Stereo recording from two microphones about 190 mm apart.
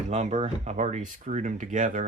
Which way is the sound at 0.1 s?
35° right (ahead or behind).